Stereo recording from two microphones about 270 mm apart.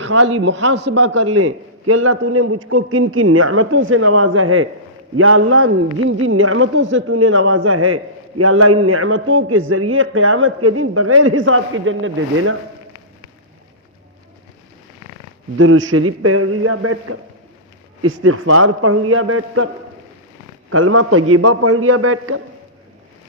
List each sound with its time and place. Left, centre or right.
0.0 s a man's voice: right
15.5 s a man's voice: right
20.7 s a man's voice: right